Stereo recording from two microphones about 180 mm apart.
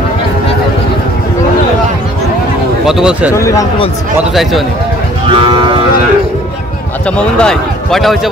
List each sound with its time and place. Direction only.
2.9 s speech: 5° right (ahead or behind)
3.3 s speech: 15° left (ahead or behind)
4.3 s speech: centre (ahead or behind)
5.3 s moo: 30° right (ahead or behind)
7.1 s speech: 5° left (ahead or behind)